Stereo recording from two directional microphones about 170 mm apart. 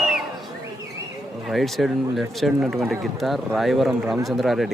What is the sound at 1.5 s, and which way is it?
Speech, centre (ahead or behind).